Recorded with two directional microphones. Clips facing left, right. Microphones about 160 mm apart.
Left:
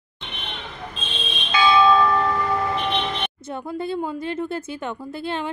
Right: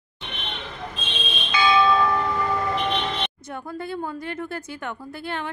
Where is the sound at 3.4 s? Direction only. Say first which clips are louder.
Left 4 dB; 25° left (ahead or behind).